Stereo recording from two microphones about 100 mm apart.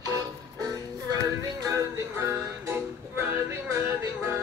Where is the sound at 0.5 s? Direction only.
35° right (ahead or behind).